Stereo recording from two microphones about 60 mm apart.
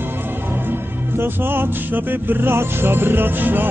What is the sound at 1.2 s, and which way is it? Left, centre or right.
Music, right.